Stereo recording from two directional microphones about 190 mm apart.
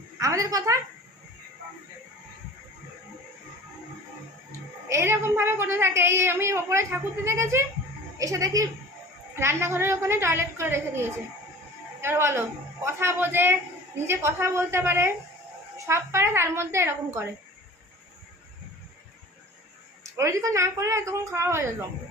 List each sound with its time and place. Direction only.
0.2 s a woman's voice: 15° right (ahead or behind)
4.9 s a woman's voice: 15° right (ahead or behind)
20.1 s a woman's voice: 15° right (ahead or behind)